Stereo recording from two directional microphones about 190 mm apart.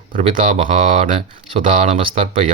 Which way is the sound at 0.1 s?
40° right (ahead or behind).